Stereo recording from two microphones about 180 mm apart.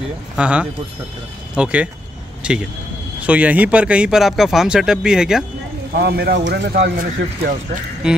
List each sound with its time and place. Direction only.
0.4 s speech: 5° right (ahead or behind)
5.9 s speech: 60° right (ahead or behind)